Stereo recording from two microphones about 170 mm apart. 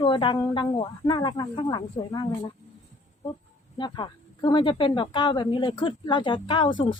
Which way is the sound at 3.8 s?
25° left (ahead or behind).